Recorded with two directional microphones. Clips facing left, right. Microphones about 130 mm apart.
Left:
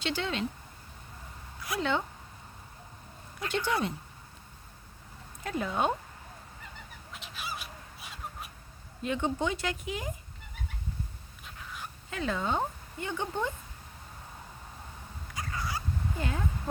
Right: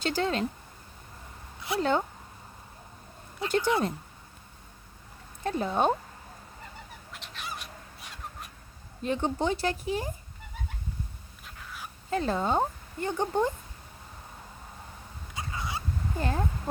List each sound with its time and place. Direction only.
0.0 s speech: 40° right (ahead or behind)
1.8 s speech: 40° right (ahead or behind)
3.6 s speech: 20° right (ahead or behind)
5.4 s speech: 30° right (ahead or behind)
7.1 s bird: 5° left (ahead or behind)
9.0 s speech: 35° right (ahead or behind)
11.4 s dog: centre (ahead or behind)
12.1 s speech: 35° right (ahead or behind)
15.3 s a sound: 25° right (ahead or behind)
16.1 s speech: 40° right (ahead or behind)